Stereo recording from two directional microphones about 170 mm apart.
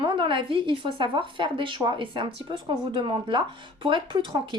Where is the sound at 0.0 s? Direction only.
30° right (ahead or behind).